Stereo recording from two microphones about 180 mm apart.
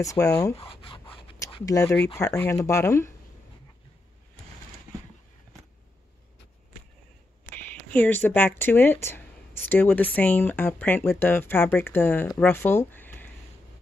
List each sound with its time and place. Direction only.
0.0 s speech: 20° left (ahead or behind)
0.6 s speech: 30° left (ahead or behind)
1.7 s speech: 20° left (ahead or behind)
7.4 s a sound: 10° left (ahead or behind)
9.7 s speech: 10° left (ahead or behind)